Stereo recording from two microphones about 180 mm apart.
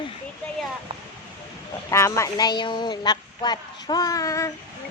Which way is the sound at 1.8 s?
15° left (ahead or behind).